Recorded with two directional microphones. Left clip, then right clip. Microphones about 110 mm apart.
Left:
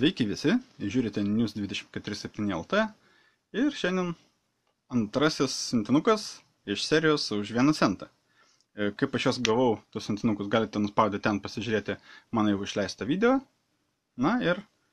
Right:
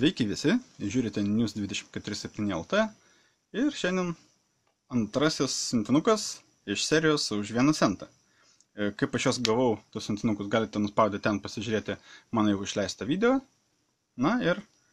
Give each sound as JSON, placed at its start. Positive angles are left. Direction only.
{"t": 0.0, "sound": "speech", "side_deg": 5}